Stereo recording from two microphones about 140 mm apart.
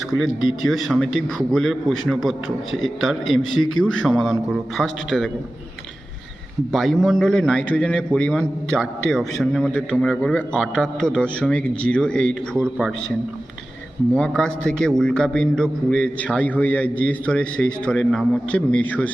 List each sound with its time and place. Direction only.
0.7 s a man's voice: centre (ahead or behind)
6.7 s a man's voice: centre (ahead or behind)
14.1 s a man's voice: 5° left (ahead or behind)